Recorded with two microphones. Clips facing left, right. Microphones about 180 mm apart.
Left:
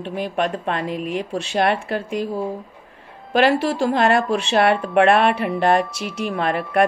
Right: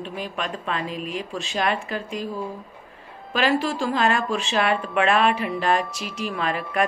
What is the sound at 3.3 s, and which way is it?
A woman's voice, 60° left (ahead or behind).